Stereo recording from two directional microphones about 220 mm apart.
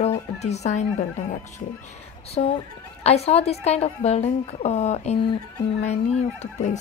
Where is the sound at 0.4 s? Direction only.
30° left (ahead or behind).